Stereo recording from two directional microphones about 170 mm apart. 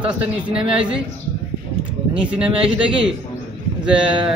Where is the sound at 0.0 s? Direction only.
5° right (ahead or behind).